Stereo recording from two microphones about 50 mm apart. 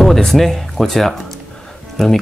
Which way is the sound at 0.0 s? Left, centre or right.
Centre.